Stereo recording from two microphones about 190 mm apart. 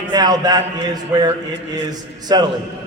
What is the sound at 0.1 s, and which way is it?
A man's voice, 20° right (ahead or behind).